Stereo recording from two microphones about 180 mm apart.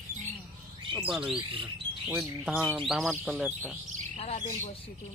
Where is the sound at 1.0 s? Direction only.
5° right (ahead or behind).